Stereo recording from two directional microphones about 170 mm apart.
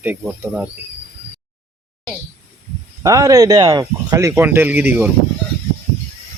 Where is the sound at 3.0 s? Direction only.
20° right (ahead or behind).